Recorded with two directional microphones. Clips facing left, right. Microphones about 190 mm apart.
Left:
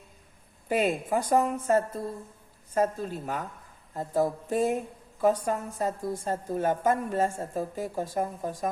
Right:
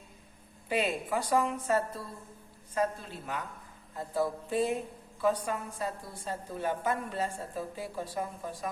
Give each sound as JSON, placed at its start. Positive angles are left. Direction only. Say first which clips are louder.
{"t": 0.7, "sound": "a woman's voice", "louder": "left 5 dB", "side_deg": 50}